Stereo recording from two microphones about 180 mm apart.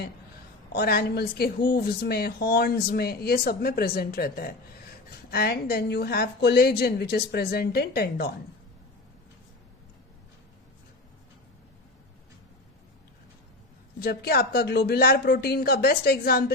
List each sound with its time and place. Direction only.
0.7 s speech: 60° left (ahead or behind)
14.0 s speech: 60° left (ahead or behind)